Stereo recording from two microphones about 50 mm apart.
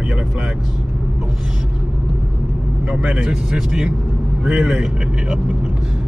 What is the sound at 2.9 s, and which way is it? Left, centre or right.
Speech, right.